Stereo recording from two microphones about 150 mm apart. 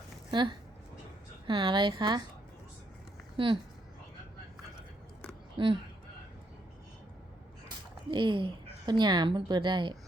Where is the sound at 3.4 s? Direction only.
35° right (ahead or behind).